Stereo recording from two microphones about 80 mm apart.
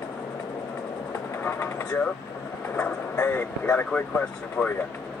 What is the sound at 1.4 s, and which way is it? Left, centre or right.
Speech, left.